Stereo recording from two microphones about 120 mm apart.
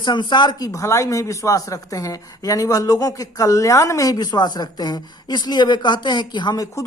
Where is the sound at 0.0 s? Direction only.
40° left (ahead or behind).